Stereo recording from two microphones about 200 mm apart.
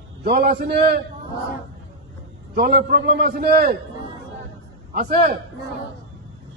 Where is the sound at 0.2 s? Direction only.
50° right (ahead or behind).